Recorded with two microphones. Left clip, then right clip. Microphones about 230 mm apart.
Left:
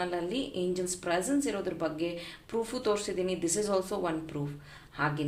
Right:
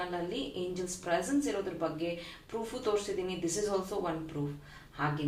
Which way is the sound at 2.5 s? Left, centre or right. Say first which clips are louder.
Left 3 dB; left.